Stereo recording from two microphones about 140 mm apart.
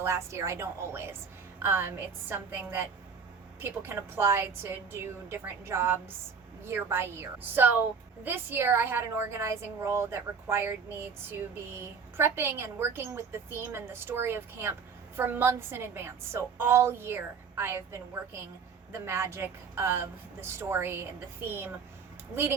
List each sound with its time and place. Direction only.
0.0 s a woman's voice: 20° right (ahead or behind)